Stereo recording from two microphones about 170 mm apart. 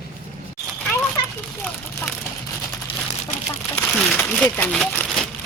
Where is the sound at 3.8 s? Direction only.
10° left (ahead or behind).